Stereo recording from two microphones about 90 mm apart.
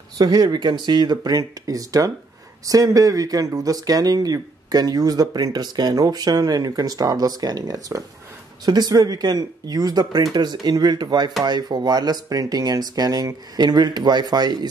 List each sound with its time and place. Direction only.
0.2 s speech: 45° right (ahead or behind)
13.6 s speech: 50° right (ahead or behind)